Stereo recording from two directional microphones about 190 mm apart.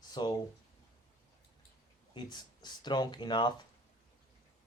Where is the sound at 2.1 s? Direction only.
25° left (ahead or behind).